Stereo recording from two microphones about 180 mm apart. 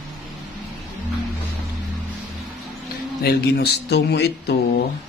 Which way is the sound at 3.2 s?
65° left (ahead or behind).